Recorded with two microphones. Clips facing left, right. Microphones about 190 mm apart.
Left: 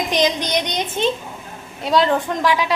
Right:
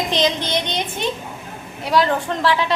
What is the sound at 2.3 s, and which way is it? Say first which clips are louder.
Speech: even; 10° left (ahead or behind).